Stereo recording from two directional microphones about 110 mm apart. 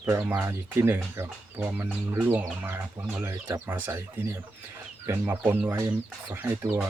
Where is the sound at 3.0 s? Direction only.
30° right (ahead or behind).